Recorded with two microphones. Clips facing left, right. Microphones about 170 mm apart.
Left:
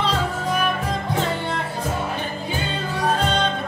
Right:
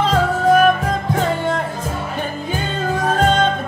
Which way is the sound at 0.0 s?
45° right (ahead or behind).